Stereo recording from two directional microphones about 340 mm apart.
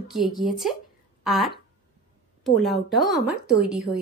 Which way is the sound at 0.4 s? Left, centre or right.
Centre.